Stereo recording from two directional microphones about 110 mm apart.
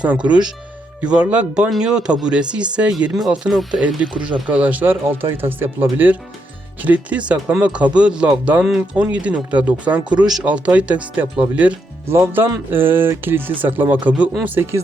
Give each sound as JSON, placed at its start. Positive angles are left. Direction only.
{"t": 0.3, "sound": "speech", "side_deg": -10}
{"t": 10.0, "sound": "speech", "side_deg": -45}
{"t": 10.2, "sound": "speech", "side_deg": -5}